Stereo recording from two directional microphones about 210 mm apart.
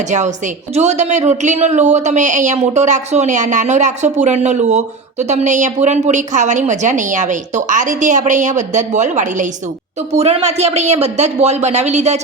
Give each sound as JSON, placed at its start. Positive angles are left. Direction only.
{"t": 0.0, "sound": "a woman's voice", "side_deg": -35}